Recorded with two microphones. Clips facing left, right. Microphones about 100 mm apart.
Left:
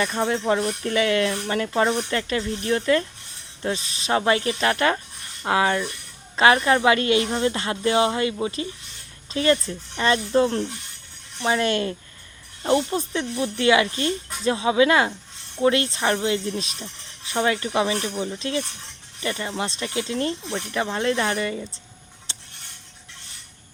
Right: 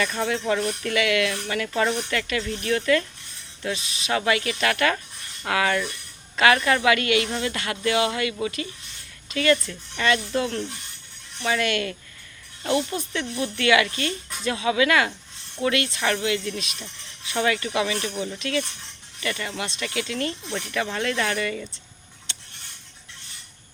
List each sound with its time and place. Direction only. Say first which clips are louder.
0.0 s speech: left 2 dB; 25° left (ahead or behind)